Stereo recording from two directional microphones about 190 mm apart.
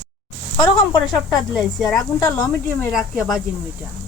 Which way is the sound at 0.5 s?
20° left (ahead or behind).